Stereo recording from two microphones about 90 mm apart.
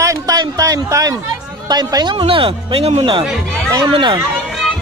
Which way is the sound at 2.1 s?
80° right.